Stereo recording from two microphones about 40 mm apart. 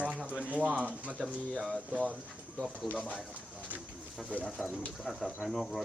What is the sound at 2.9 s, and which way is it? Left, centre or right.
Speech, left.